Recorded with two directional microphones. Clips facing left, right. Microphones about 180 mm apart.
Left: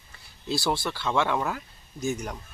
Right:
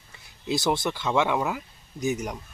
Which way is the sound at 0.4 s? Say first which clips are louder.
Right 3 dB; 20° right (ahead or behind).